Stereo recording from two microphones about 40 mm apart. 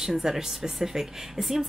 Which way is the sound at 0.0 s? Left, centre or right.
Centre.